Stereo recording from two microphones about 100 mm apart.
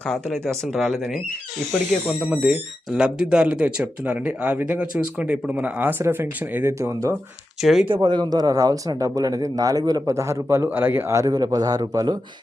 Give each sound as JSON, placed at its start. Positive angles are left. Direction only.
{"t": 0.0, "sound": "speech", "side_deg": 5}
{"t": 2.9, "sound": "speech", "side_deg": -10}
{"t": 7.6, "sound": "speech", "side_deg": 0}
{"t": 8.0, "sound": "speech", "side_deg": -45}